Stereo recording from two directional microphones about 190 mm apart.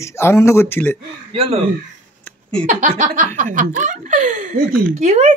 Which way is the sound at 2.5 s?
40° right (ahead or behind).